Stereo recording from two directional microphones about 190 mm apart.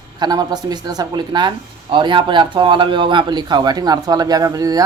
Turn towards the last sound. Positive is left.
turn(degrees=-20)  # may be behind; listen again after turning